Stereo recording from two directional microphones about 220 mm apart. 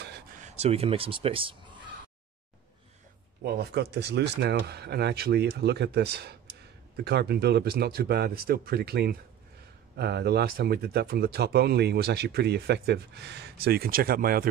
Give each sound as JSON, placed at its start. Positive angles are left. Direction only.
{"t": 0.4, "sound": "speech", "side_deg": -30}
{"t": 3.4, "sound": "speech", "side_deg": -50}